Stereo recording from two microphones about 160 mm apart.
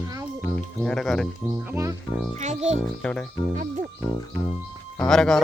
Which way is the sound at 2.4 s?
45° right (ahead or behind).